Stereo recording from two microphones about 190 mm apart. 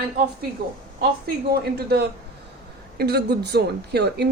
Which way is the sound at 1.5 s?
55° right (ahead or behind).